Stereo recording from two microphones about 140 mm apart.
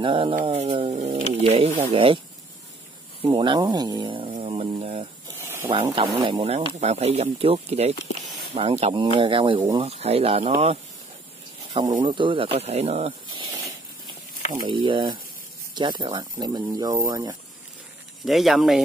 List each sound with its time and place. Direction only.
0.0 s speech: 35° right (ahead or behind)
3.3 s speech: 35° right (ahead or behind)
4.4 s a sound: 45° right (ahead or behind)
5.7 s speech: 35° right (ahead or behind)
12.0 s speech: 35° right (ahead or behind)
14.7 s speech: 35° right (ahead or behind)
18.2 s speech: centre (ahead or behind)